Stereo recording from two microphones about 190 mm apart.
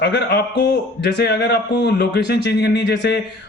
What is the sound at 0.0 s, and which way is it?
A man's voice, 60° left (ahead or behind).